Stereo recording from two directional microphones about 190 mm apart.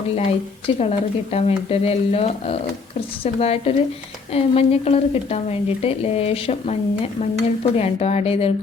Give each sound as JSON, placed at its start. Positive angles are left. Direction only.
{"t": 0.8, "sound": "speech", "side_deg": 35}